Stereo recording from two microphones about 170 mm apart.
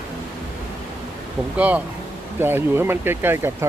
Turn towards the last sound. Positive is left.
turn(degrees=-15)  # may be behind; listen again after turning